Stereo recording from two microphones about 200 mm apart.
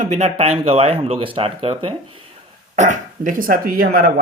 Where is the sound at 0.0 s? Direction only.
35° right (ahead or behind).